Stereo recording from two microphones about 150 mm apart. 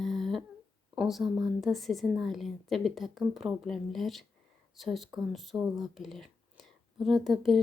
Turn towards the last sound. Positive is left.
turn(degrees=0)  # may be behind; listen again after turning